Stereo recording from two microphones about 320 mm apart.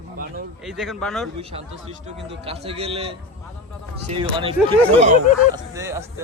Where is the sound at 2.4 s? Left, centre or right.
Centre.